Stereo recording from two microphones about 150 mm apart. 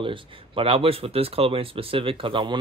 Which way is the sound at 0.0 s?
35° right (ahead or behind).